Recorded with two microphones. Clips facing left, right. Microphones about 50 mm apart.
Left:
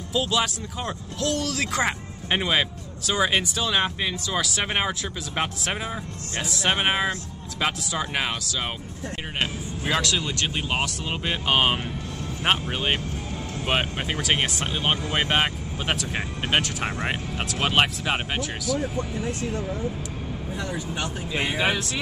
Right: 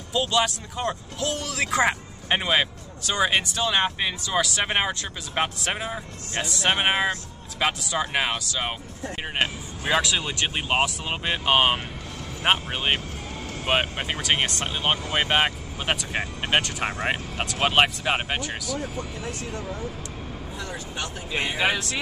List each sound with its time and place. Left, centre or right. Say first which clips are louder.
0.1 s speech: right 1 dB; centre
9.9 s speech: right 2 dB; centre
18.8 s speech: left 4 dB; left
20.5 s speech: left 3 dB; centre
21.4 s speech: even; centre